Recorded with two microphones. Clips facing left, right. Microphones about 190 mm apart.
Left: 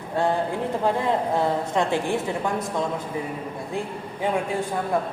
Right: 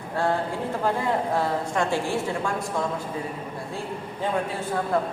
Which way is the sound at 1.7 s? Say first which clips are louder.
Left 2 dB; 20° left (ahead or behind).